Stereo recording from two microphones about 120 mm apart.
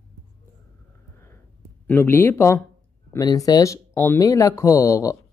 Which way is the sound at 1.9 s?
20° left (ahead or behind).